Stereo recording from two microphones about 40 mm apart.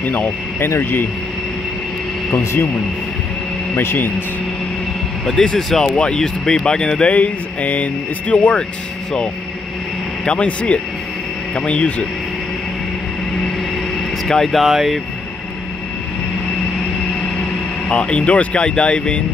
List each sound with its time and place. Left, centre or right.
0.0 s speech: left
0.7 s speech: left
3.7 s speech: left
5.2 s speech: centre
5.9 s speech: left
7.1 s speech: left
10.2 s speech: left
13.9 s vehicle: centre
14.6 s speech: centre
17.8 s speech: left